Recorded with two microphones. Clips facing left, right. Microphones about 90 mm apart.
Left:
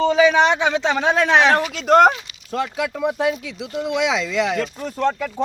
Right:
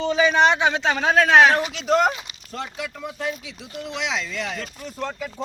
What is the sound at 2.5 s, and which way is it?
Speech, 80° left.